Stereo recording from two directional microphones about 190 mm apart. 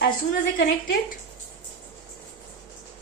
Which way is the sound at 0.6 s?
55° left (ahead or behind).